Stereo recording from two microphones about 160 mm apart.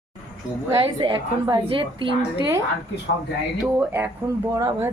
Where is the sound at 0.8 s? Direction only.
30° right (ahead or behind).